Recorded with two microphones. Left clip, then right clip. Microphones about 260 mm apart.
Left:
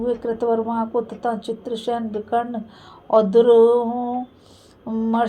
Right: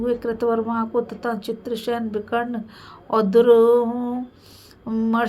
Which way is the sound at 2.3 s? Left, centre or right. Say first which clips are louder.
Left 3 dB; right.